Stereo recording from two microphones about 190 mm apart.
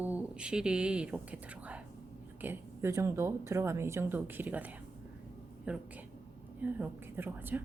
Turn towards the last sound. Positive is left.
turn(degrees=-10)  # may be behind; listen again after turning